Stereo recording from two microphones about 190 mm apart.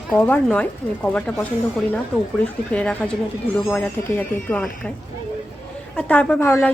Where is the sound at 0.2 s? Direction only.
5° left (ahead or behind).